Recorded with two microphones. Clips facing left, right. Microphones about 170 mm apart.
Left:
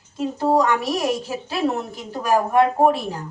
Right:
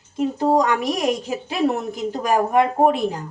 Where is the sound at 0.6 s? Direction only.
15° right (ahead or behind).